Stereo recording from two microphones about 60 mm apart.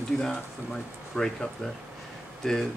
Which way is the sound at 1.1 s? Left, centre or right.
Centre.